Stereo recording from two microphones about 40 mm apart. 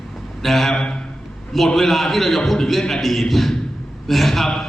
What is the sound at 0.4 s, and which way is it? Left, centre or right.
A man's voice, centre.